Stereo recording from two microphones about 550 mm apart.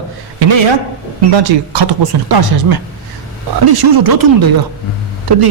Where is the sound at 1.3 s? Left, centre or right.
Right.